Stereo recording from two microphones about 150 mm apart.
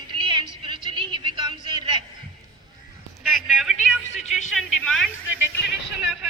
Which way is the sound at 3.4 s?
Centre (ahead or behind).